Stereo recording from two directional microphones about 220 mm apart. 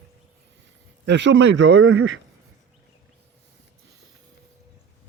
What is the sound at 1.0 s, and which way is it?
Speech, 55° right (ahead or behind).